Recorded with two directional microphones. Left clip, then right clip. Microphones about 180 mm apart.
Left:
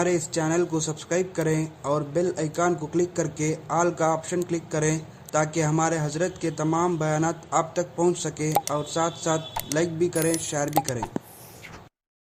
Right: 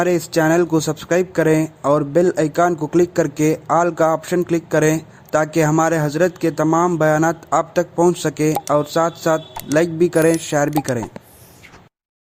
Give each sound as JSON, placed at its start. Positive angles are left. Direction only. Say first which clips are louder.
{"t": 0.0, "sound": "a man's voice", "louder": "right 8 dB", "side_deg": -45}
{"t": 10.7, "sound": "speech", "louder": "right 4 dB", "side_deg": 0}